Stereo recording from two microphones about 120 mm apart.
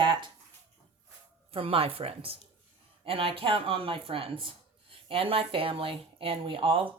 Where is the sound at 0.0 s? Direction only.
40° right (ahead or behind).